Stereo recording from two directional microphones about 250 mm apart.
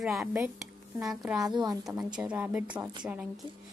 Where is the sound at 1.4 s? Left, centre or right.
Centre.